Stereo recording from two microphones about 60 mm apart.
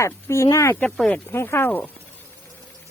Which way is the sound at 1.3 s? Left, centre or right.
Left.